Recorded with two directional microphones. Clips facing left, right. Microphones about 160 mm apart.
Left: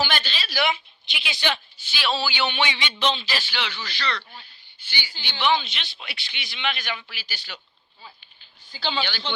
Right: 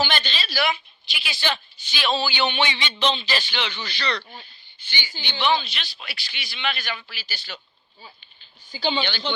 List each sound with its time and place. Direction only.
0.0 s a sound: 10° left (ahead or behind)
1.8 s a man's voice: 5° left (ahead or behind)
8.7 s speech: 10° right (ahead or behind)